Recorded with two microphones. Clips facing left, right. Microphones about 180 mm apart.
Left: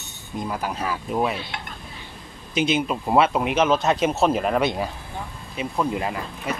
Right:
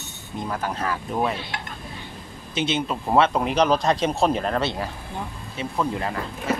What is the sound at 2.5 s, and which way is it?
Speech, 10° left (ahead or behind).